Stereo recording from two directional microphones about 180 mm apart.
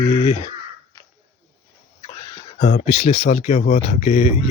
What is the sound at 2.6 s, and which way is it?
Speech, 40° left (ahead or behind).